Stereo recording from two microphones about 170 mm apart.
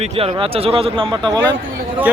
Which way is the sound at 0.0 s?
35° right (ahead or behind).